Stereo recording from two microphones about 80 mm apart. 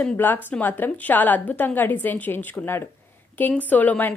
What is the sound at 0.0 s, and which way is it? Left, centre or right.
A woman's voice, centre.